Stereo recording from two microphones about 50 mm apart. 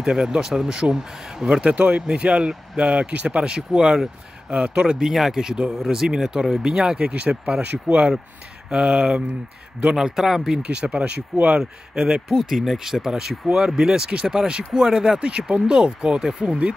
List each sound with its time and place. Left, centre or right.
0.0 s a man's voice: centre
4.9 s speech: centre
10.6 s a man's voice: right
12.3 s speech: centre